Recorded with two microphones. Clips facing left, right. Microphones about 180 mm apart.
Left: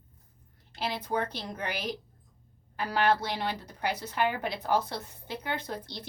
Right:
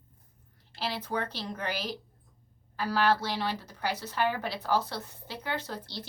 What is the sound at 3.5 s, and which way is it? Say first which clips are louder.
Speech: even; 55° left (ahead or behind).